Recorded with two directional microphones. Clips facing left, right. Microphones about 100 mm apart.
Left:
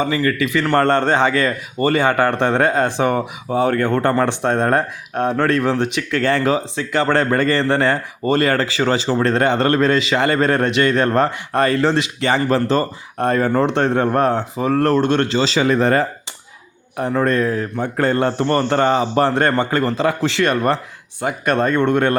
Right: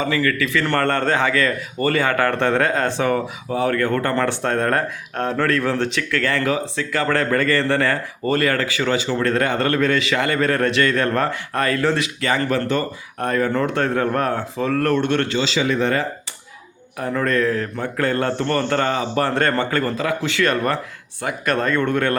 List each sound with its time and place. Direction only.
0.0 s speech: 25° left (ahead or behind)
9.1 s speech: 25° left (ahead or behind)
17.0 s speech: 25° left (ahead or behind)
17.9 s speech: 30° left (ahead or behind)